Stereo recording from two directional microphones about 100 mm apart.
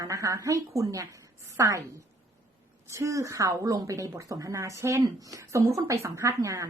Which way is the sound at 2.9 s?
30° right (ahead or behind).